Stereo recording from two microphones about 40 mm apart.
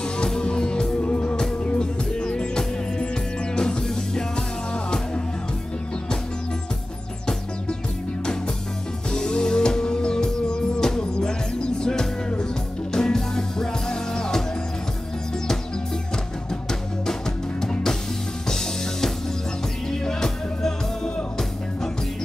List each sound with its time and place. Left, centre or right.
0.3 s music: left
1.0 s music: left
1.3 s music: left
9.1 s music: centre
17.0 s music: centre